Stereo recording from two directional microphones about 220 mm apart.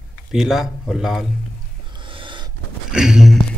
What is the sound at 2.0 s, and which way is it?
Snort, 20° right (ahead or behind).